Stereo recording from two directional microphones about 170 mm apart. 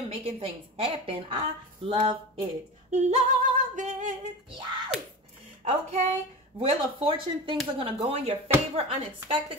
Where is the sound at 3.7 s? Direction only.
45° right (ahead or behind).